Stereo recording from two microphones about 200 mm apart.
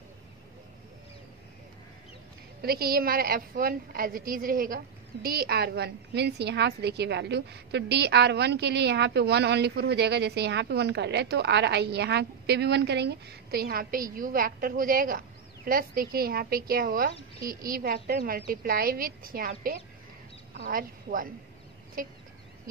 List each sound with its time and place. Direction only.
2.6 s a woman's voice: 50° right (ahead or behind)